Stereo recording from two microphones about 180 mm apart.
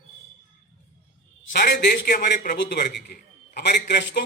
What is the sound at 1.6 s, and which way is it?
Speech, 60° left (ahead or behind).